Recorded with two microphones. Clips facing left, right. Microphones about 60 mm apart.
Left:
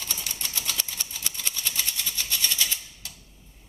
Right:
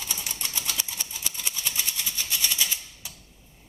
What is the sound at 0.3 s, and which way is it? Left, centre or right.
Typewriter, right.